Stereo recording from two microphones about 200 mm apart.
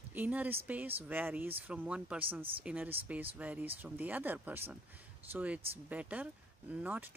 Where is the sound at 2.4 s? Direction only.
25° right (ahead or behind).